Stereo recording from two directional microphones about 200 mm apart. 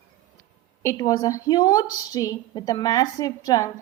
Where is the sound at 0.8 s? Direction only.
15° left (ahead or behind).